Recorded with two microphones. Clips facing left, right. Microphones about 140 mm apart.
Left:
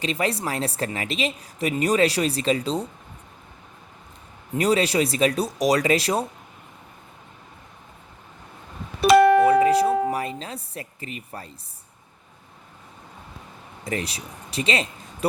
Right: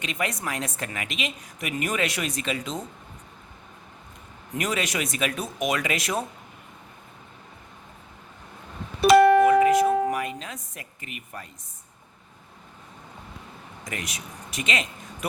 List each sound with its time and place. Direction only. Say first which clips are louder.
0.0 s speech: left 5 dB; 30° left (ahead or behind)
4.5 s speech: left 7 dB; 30° left (ahead or behind)
9.5 s music: left 1 dB; 30° left (ahead or behind)
13.8 s speech: left 7 dB; 30° left (ahead or behind)